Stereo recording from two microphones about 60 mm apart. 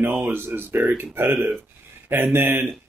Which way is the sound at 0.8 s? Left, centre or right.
Right.